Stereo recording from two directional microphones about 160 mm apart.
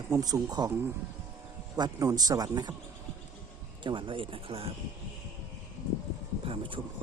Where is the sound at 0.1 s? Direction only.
20° right (ahead or behind).